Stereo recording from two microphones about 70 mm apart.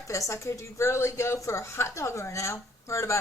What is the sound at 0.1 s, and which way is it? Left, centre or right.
A woman's voice, left.